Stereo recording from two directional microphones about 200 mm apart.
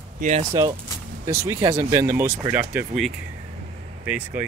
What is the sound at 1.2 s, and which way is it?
Speech, 15° right (ahead or behind).